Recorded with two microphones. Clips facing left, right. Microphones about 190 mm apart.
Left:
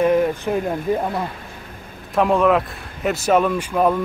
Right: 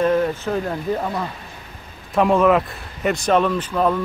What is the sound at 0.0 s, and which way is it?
Speech, 15° left (ahead or behind).